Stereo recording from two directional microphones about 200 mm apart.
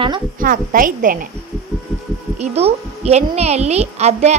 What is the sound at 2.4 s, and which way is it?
A woman's voice, 30° right (ahead or behind).